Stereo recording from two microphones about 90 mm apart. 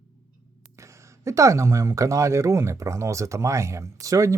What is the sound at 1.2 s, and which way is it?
Speech, 35° right (ahead or behind).